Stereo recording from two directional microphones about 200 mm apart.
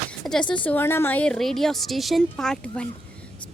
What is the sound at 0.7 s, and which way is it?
A woman's voice, 10° left (ahead or behind).